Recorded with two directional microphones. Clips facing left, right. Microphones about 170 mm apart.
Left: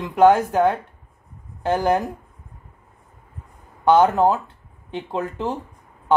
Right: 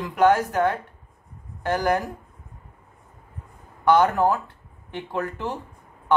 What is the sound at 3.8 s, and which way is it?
Speech, 25° left (ahead or behind).